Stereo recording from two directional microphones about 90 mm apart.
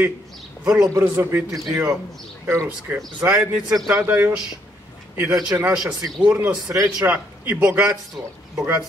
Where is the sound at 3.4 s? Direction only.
15° right (ahead or behind).